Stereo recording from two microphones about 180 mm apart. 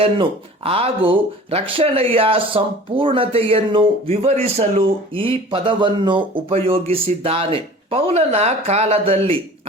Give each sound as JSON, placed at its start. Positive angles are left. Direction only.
{"t": 0.0, "sound": "speech", "side_deg": -30}